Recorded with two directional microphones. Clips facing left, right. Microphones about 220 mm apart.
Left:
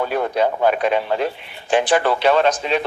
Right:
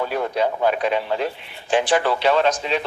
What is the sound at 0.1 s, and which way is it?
Speech, 55° left (ahead or behind).